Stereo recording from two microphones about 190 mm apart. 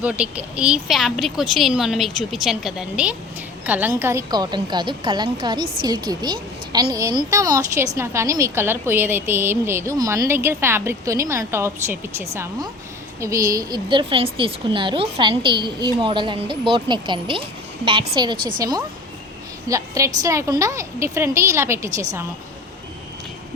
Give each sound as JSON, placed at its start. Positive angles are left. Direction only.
{"t": 0.0, "sound": "a woman's voice", "side_deg": -5}
{"t": 19.6, "sound": "a woman's voice", "side_deg": -15}